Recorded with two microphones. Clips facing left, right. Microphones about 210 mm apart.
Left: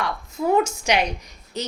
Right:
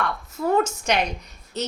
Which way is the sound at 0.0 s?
10° left (ahead or behind).